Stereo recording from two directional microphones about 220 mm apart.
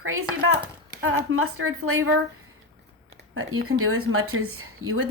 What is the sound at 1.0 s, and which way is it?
Speech, 70° right (ahead or behind).